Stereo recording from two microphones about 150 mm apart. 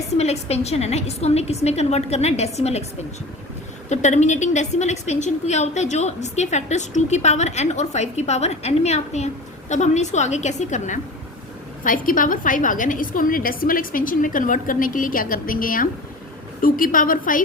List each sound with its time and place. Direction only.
0.2 s a woman's voice: 45° left (ahead or behind)
3.8 s a woman's voice: 50° left (ahead or behind)